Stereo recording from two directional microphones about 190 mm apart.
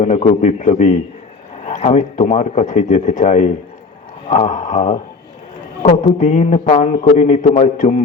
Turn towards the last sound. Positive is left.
turn(degrees=40)  # may be behind; listen again after turning